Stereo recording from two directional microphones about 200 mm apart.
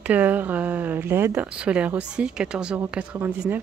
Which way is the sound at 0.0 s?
10° right (ahead or behind).